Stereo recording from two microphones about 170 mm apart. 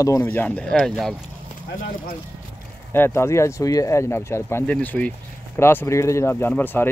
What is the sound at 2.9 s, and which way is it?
Speech, 15° left (ahead or behind).